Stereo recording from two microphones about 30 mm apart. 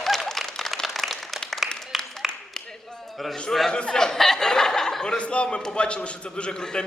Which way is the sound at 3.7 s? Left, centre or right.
Left.